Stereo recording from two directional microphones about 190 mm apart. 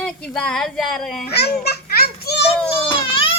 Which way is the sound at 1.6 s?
55° left (ahead or behind).